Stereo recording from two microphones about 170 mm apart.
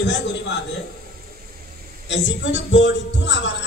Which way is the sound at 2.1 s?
90° left.